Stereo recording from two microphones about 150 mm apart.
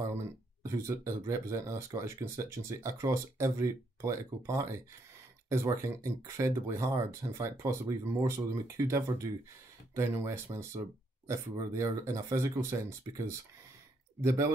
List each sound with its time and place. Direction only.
0.7 s speech: 20° right (ahead or behind)